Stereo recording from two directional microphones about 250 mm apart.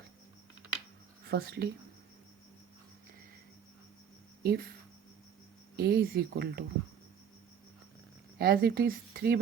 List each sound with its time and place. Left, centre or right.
1.2 s speech: right
4.4 s speech: right
5.7 s speech: right
8.4 s speech: right